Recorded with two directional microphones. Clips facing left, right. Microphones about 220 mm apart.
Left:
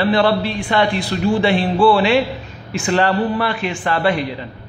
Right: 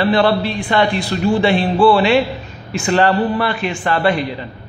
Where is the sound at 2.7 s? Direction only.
40° right (ahead or behind).